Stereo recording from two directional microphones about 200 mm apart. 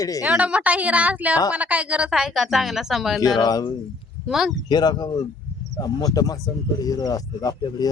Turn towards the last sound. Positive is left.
turn(degrees=20)  # may be behind; listen again after turning